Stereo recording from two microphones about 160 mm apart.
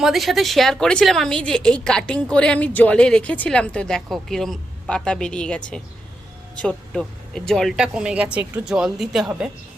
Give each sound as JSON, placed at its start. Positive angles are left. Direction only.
{"t": 0.0, "sound": "a woman's voice", "side_deg": 0}